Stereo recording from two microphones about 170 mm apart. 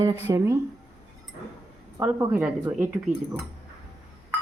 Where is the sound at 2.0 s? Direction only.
15° right (ahead or behind).